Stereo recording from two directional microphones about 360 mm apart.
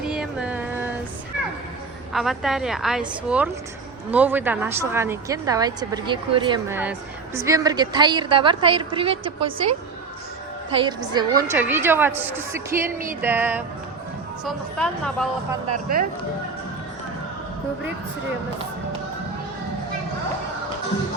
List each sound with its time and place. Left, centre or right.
0.0 s a sound: centre
2.1 s a woman's voice: centre
10.8 s a woman's voice: centre
15.7 s speech: right